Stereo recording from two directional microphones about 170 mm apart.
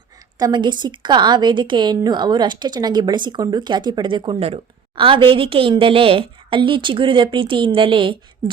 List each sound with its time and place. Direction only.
0.3 s a woman's voice: 25° right (ahead or behind)